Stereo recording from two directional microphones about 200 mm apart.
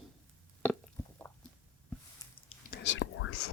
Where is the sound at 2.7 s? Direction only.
65° left (ahead or behind); by 3.5 s 90° left.